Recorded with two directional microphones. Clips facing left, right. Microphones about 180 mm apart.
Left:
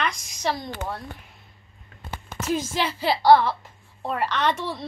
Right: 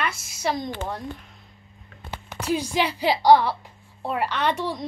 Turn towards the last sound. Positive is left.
turn(degrees=-15)  # may be behind; listen again after turning